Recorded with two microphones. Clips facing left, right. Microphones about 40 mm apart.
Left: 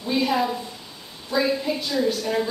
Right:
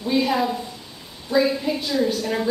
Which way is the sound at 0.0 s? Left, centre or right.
Centre.